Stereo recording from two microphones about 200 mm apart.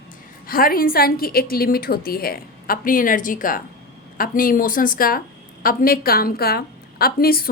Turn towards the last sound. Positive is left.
turn(degrees=50)  # may be behind; listen again after turning